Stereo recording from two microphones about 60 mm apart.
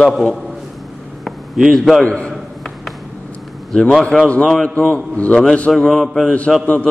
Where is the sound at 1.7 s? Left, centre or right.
Centre.